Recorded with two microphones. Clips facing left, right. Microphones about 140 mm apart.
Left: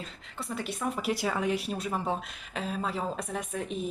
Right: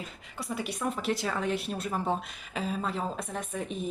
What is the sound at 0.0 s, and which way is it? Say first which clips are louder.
A woman's voice: even; 5° right (ahead or behind).